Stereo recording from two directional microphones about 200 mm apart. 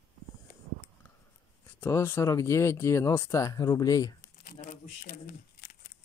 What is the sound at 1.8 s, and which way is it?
Speech, 10° left (ahead or behind).